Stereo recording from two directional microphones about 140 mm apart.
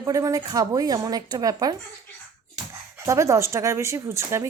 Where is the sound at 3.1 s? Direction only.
20° right (ahead or behind).